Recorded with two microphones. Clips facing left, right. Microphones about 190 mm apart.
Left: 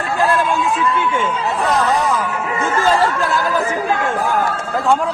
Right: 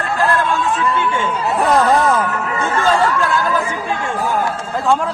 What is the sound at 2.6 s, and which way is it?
Chatter, 30° left (ahead or behind).